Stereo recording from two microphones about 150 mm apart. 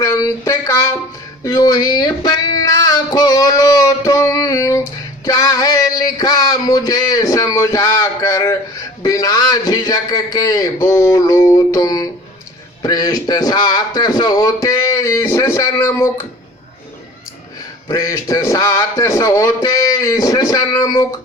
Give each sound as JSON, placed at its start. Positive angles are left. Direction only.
{"t": 0.0, "sound": "a sound", "side_deg": 20}
{"t": 1.5, "sound": "speech", "side_deg": 25}
{"t": 17.9, "sound": "speech", "side_deg": 20}